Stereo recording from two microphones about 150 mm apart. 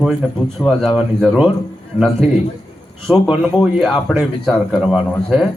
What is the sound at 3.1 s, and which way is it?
Speech, 5° right (ahead or behind).